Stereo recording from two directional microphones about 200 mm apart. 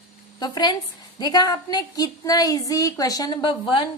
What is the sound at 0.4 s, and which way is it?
A woman's voice, 20° left (ahead or behind).